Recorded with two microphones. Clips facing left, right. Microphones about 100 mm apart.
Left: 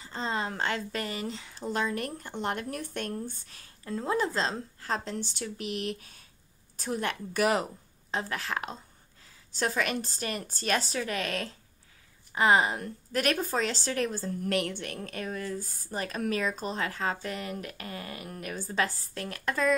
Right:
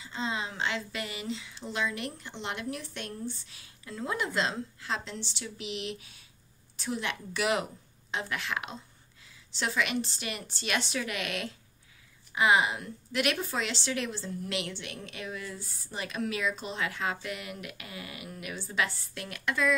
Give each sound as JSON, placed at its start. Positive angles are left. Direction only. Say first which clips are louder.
{"t": 0.0, "sound": "a woman's voice", "louder": "left 2 dB", "side_deg": 45}